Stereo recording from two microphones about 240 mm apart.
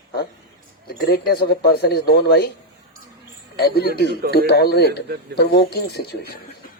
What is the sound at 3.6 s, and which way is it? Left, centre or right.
Speech, left.